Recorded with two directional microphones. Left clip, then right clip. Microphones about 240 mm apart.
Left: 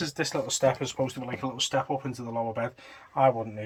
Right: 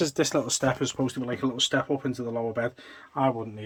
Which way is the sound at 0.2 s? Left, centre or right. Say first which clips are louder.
Right 1 dB; centre.